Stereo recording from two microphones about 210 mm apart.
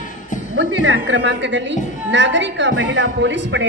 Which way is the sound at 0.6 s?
60° right (ahead or behind).